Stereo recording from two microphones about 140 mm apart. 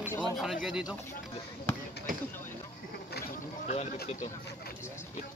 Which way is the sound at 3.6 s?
55° left (ahead or behind).